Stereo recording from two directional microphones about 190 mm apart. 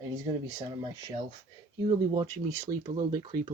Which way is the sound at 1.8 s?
25° right (ahead or behind).